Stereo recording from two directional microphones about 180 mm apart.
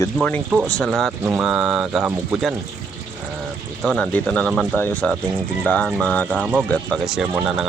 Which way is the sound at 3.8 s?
5° left (ahead or behind).